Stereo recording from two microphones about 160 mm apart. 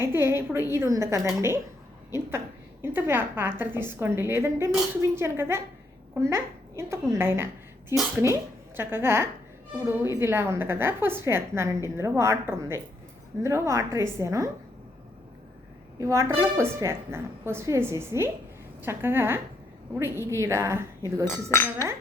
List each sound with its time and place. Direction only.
0.0 s a woman's voice: 15° right (ahead or behind)
2.8 s a woman's voice: 15° right (ahead or behind)
16.0 s a woman's voice: 20° right (ahead or behind)
21.5 s speech: 15° left (ahead or behind)